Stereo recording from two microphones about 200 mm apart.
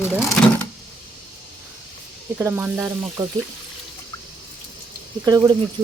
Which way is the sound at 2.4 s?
10° right (ahead or behind).